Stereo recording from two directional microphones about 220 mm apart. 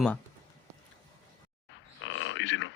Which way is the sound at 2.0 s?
60° left (ahead or behind).